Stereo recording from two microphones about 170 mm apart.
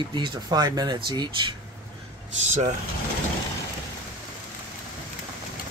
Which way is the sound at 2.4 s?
45° right (ahead or behind).